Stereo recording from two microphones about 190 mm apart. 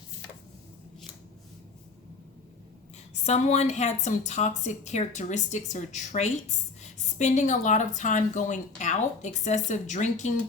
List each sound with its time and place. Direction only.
3.2 s a woman's voice: 35° left (ahead or behind)